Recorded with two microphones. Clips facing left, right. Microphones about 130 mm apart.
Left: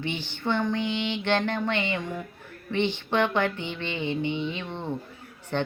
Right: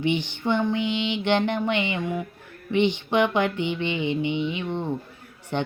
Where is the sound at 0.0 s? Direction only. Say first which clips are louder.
Right 6 dB; 15° right (ahead or behind).